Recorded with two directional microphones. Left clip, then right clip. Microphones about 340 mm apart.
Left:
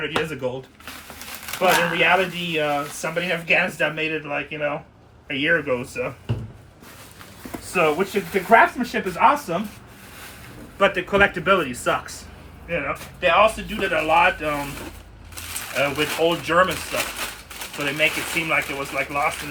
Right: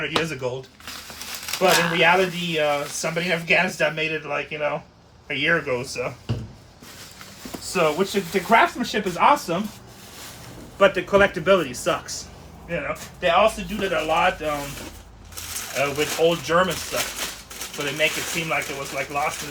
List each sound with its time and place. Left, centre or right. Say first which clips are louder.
0.0 s speech: even; centre
7.7 s speech: left 1 dB; centre
10.8 s speech: right 1 dB; centre
15.7 s speech: left 1 dB; centre